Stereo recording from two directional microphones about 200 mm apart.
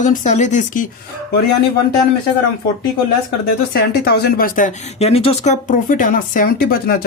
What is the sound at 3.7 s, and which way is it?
Speech, 50° left (ahead or behind).